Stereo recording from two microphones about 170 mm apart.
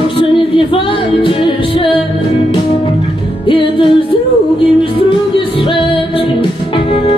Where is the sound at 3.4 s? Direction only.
30° left (ahead or behind).